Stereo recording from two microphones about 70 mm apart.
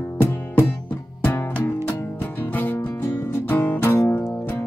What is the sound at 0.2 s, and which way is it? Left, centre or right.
Music, left.